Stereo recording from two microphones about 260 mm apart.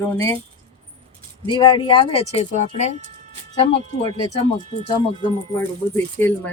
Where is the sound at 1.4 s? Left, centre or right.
Centre.